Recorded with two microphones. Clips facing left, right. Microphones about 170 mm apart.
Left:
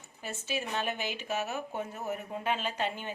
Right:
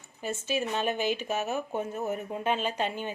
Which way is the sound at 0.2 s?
20° right (ahead or behind).